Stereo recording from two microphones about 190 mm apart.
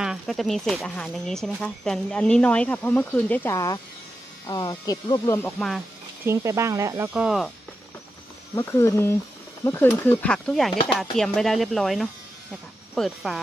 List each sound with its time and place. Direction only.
0.0 s speech: centre (ahead or behind); by 5.5 s 15° left (ahead or behind)
6.2 s speech: 15° right (ahead or behind)
8.5 s speech: 15° left (ahead or behind)